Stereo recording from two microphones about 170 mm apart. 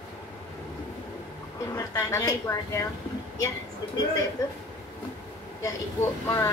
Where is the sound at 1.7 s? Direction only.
20° left (ahead or behind).